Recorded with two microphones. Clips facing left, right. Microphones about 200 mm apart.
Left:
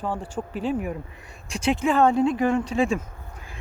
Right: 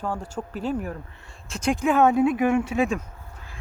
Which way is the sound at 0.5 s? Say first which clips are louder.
Left 1 dB; 40° right (ahead or behind).